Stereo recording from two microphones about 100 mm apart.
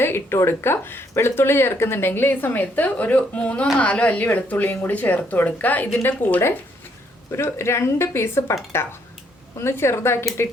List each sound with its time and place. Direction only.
0.0 s speech: 25° left (ahead or behind)